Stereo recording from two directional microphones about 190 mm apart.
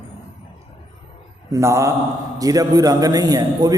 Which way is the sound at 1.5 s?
15° right (ahead or behind).